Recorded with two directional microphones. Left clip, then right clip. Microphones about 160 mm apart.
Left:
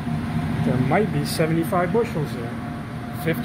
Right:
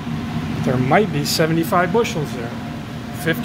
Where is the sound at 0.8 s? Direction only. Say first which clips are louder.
Right 7 dB; 15° right (ahead or behind).